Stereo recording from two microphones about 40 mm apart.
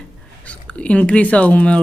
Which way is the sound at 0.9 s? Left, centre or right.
Left.